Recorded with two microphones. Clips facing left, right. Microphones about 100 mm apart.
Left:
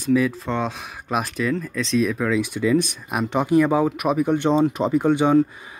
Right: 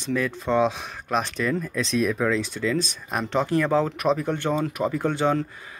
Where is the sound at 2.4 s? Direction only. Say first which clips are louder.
Left 6 dB; 15° left (ahead or behind).